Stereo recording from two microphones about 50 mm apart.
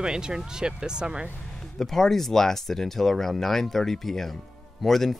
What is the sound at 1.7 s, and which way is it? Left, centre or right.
Speech, centre.